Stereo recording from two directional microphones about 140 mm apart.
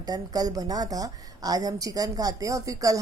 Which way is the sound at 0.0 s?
25° right (ahead or behind).